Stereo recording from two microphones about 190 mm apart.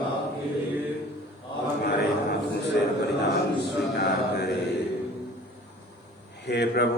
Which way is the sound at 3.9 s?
60° left (ahead or behind).